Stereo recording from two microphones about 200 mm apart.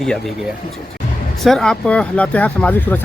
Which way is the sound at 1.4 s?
Centre (ahead or behind).